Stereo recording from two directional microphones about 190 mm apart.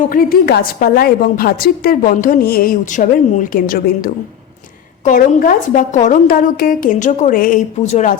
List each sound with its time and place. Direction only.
0.1 s a woman's voice: 50° left (ahead or behind)